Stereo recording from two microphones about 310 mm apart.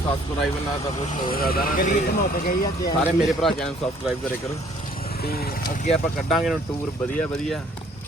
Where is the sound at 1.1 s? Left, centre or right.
Left.